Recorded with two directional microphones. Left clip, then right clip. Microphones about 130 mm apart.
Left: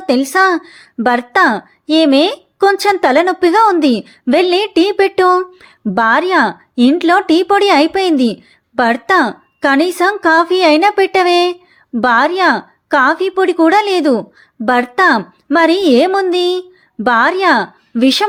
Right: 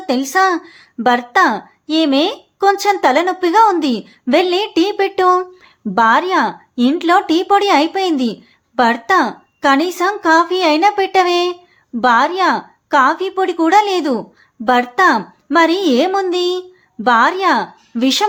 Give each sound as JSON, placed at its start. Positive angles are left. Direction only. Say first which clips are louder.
{"t": 0.0, "sound": "speech", "louder": "left 3 dB", "side_deg": 35}